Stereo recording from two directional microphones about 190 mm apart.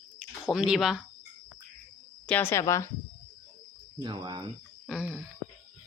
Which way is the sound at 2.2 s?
10° left (ahead or behind).